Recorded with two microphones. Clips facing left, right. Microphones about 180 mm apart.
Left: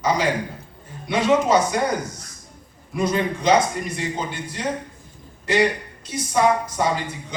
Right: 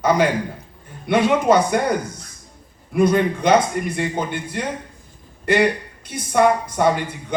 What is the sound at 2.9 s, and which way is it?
Speech, 55° right (ahead or behind).